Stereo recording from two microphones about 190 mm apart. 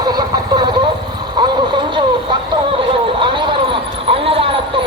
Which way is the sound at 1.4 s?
25° right (ahead or behind).